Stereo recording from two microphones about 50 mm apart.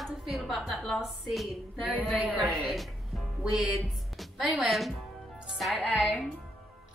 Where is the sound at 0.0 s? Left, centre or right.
Centre.